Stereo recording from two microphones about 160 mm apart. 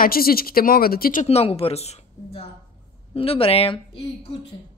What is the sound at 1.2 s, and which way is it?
A woman's voice, 40° left (ahead or behind).